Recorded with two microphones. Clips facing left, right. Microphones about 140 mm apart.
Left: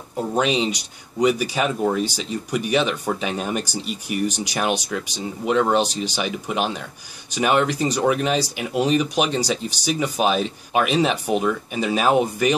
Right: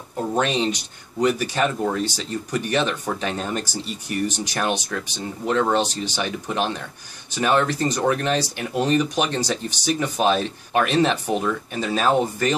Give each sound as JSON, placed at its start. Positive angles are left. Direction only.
{"t": 0.3, "sound": "speech", "side_deg": 10}